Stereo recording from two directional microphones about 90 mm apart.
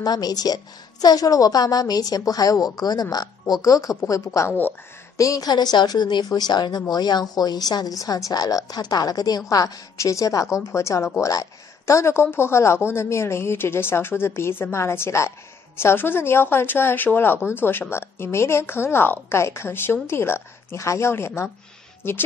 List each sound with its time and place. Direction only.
0.0 s a woman's voice: 45° left (ahead or behind); by 22.2 s 25° left (ahead or behind)